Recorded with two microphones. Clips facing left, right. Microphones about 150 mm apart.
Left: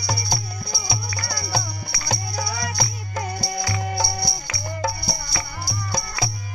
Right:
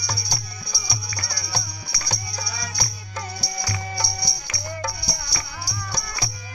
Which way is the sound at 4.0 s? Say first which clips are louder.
Left 5 dB; 50° left (ahead or behind).